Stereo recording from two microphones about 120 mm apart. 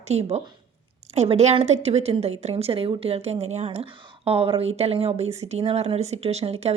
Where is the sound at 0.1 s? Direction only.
60° right (ahead or behind).